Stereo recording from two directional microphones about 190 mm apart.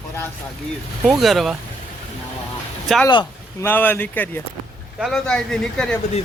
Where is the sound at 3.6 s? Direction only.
10° left (ahead or behind).